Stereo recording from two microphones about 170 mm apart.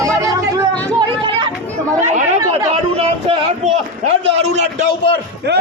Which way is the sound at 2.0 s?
45° right (ahead or behind).